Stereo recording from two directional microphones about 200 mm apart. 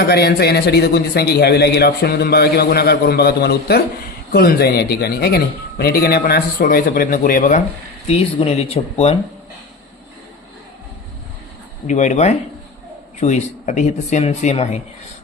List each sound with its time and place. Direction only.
0.0 s a man's voice: 55° left (ahead or behind)
8.0 s speech: 30° left (ahead or behind)
11.9 s speech: 35° left (ahead or behind)